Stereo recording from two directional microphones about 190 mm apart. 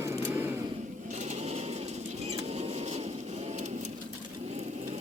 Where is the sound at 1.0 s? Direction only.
35° right (ahead or behind).